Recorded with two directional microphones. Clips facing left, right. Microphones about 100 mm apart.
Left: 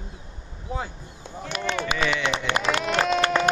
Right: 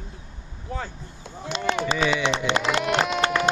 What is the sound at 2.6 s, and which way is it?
Speech, 5° right (ahead or behind).